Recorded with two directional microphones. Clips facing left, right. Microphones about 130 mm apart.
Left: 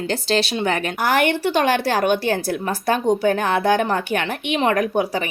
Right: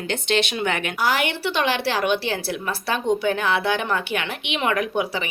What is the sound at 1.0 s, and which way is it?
A woman's voice, 50° left (ahead or behind).